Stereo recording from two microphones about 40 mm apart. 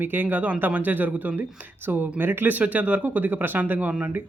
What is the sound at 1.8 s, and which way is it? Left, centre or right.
Speech, right.